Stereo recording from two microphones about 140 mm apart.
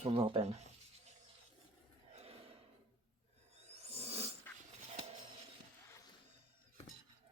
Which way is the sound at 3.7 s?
50° right (ahead or behind).